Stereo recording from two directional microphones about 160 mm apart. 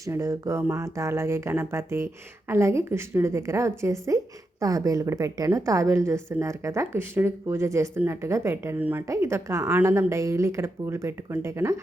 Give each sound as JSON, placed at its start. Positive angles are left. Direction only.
{"t": 0.0, "sound": "a woman's voice", "side_deg": -20}